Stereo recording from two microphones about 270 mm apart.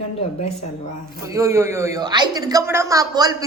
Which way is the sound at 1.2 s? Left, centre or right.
Centre.